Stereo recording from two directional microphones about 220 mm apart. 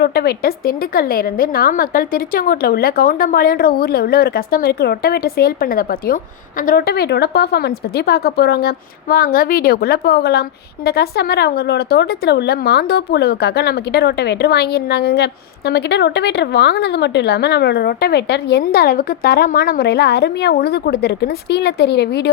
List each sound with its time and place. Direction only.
0.0 s speech: 45° left (ahead or behind)